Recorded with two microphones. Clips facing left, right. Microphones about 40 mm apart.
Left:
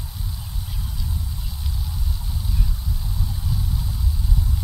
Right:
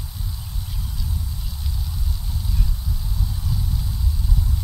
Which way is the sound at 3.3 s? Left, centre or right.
Centre.